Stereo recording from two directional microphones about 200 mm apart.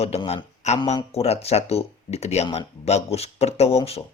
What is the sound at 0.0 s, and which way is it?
A man's voice, 30° left (ahead or behind).